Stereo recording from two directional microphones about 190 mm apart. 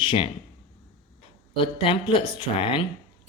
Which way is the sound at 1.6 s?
25° left (ahead or behind).